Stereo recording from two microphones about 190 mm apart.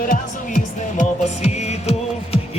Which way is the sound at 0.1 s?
40° left (ahead or behind).